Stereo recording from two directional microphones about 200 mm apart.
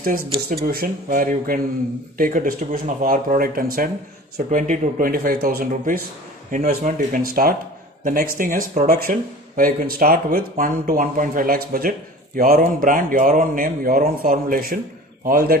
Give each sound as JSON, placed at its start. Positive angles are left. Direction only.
{"t": 0.0, "sound": "speech", "side_deg": -50}